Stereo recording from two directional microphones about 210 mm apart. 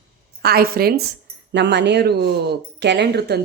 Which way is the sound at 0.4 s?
45° right (ahead or behind).